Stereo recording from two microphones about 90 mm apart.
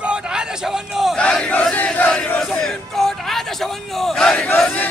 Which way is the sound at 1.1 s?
10° left (ahead or behind).